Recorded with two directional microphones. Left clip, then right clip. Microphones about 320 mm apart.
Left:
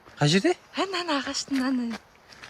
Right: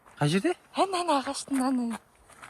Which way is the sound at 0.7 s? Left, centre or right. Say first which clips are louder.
Right 2 dB; centre.